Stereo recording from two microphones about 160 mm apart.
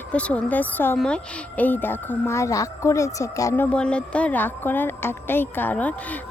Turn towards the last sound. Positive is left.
turn(degrees=10)  # may be behind; listen again after turning